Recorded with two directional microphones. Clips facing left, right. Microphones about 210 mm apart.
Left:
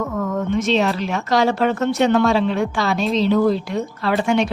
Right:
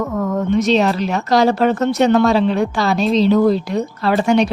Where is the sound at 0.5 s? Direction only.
40° right (ahead or behind).